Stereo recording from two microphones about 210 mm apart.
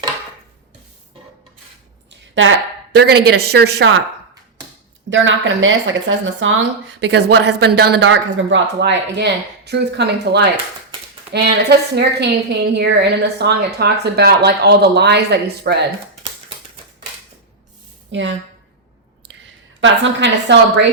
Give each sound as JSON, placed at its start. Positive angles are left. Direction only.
{"t": 2.0, "sound": "a woman's voice", "side_deg": -65}
{"t": 5.0, "sound": "speech", "side_deg": -65}
{"t": 18.1, "sound": "speech", "side_deg": -60}
{"t": 19.8, "sound": "speech", "side_deg": -60}